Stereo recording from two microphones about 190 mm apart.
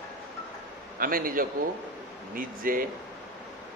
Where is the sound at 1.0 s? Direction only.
50° right (ahead or behind).